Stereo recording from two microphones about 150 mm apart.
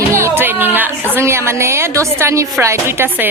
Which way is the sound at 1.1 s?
15° right (ahead or behind).